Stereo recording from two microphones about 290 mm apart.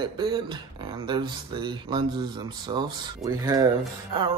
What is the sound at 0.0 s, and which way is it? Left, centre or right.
Speech, centre.